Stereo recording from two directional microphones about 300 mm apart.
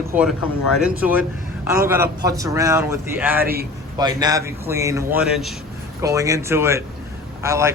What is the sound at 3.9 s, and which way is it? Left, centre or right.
Speech, centre.